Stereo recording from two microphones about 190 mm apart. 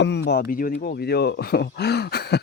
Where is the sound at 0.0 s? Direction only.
60° left (ahead or behind).